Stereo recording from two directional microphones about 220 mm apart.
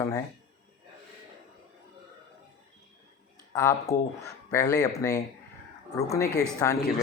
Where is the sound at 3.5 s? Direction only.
10° left (ahead or behind).